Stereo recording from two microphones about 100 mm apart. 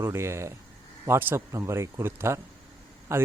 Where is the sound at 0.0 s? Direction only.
25° right (ahead or behind).